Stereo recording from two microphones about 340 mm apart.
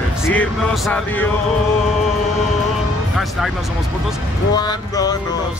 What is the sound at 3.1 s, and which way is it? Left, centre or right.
Speech, centre.